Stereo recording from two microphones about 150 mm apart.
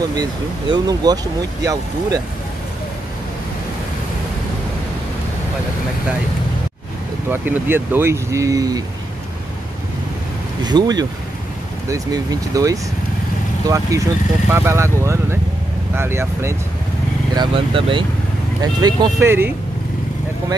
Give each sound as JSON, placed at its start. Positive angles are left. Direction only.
{"t": 0.1, "sound": "speech", "side_deg": -25}
{"t": 7.2, "sound": "speech", "side_deg": -15}
{"t": 10.6, "sound": "speech", "side_deg": -30}
{"t": 17.3, "sound": "speech", "side_deg": -30}